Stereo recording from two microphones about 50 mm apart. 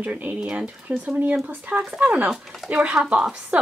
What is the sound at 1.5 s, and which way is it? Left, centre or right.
Speech, right.